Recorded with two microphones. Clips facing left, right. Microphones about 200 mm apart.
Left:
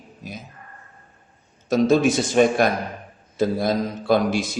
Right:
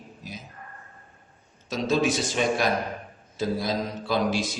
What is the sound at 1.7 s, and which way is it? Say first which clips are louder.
A man's voice: left 7 dB; 50° left (ahead or behind).